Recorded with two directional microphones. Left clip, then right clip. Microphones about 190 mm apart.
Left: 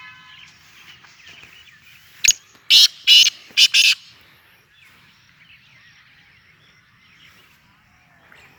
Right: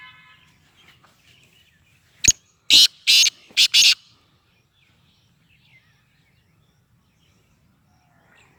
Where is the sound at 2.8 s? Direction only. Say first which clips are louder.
Left 6 dB; 15° right (ahead or behind).